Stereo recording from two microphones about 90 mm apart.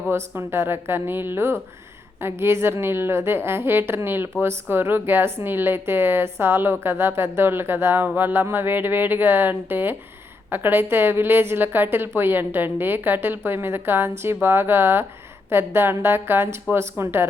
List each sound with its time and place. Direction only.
0.1 s a woman's voice: 25° right (ahead or behind)